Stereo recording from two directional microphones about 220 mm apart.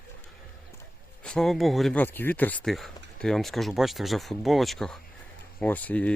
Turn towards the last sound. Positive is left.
turn(degrees=5)  # may be behind; listen again after turning